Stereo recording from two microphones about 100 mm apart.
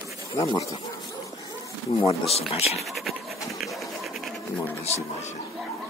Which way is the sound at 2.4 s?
90° left.